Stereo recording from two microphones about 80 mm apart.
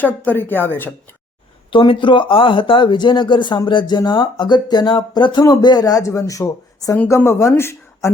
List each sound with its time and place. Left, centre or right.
0.0 s a woman's voice: left
1.7 s speech: left
3.7 s speech: left